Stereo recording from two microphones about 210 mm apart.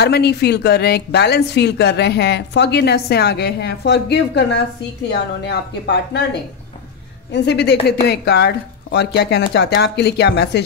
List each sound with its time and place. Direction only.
0.0 s a woman's voice: 50° left (ahead or behind)
7.3 s a woman's voice: 55° left (ahead or behind)